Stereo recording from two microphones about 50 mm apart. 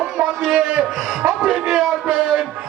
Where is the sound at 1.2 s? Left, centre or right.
Right.